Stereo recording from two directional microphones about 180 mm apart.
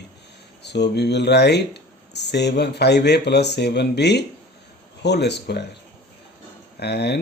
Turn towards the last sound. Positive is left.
turn(degrees=65)  # may be behind; listen again after turning